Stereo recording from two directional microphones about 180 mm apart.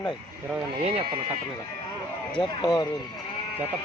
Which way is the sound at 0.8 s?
35° right (ahead or behind).